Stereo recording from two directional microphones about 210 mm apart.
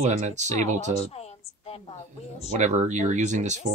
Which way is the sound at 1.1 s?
30° left (ahead or behind).